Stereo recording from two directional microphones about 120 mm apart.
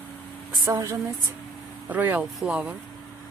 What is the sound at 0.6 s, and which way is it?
Speech, 25° right (ahead or behind).